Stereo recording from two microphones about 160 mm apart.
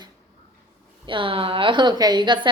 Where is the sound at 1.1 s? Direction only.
30° right (ahead or behind).